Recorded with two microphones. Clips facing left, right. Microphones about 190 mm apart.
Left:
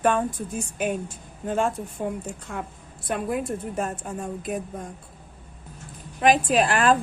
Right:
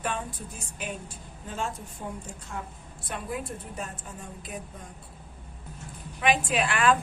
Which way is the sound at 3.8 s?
50° left (ahead or behind).